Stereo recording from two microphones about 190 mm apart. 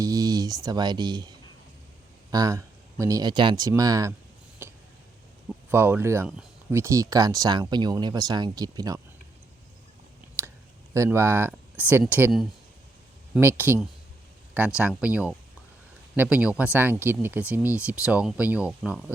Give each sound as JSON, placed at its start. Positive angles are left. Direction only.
{"t": 0.0, "sound": "speech", "side_deg": -20}
{"t": 2.3, "sound": "speech", "side_deg": -20}
{"t": 4.6, "sound": "a sound", "side_deg": -10}
{"t": 5.7, "sound": "speech", "side_deg": -10}
{"t": 10.9, "sound": "speech", "side_deg": -15}